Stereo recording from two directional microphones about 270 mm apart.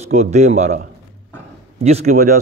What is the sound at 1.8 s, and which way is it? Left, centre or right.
Speech, right.